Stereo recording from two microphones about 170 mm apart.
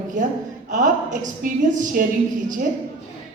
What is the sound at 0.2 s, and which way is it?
A woman's voice, 50° right (ahead or behind).